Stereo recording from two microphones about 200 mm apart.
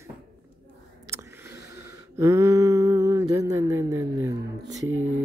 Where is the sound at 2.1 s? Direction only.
15° right (ahead or behind).